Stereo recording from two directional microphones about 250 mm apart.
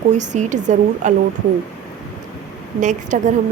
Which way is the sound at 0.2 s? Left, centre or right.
Right.